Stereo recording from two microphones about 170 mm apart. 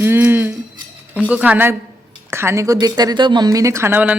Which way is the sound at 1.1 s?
10° right (ahead or behind).